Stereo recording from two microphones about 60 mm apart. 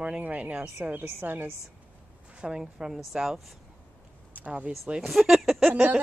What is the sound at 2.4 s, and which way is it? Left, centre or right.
Speech, centre.